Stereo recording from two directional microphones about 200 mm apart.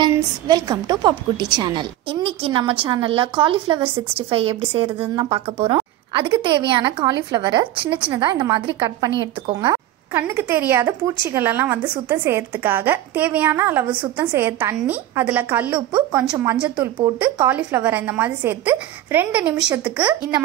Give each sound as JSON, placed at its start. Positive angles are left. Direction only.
{"t": 0.0, "sound": "a woman's voice", "side_deg": -20}